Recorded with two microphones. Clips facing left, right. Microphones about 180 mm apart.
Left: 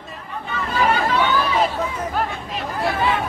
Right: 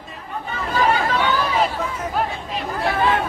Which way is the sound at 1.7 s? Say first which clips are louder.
Left 1 dB; 15° left (ahead or behind).